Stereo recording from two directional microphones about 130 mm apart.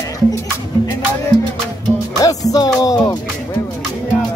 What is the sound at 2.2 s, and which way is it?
Music, 30° left (ahead or behind).